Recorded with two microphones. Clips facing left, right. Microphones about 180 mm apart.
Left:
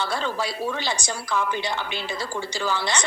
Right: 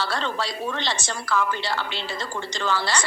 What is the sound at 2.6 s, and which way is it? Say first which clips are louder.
Speech: right 1 dB; 15° left (ahead or behind).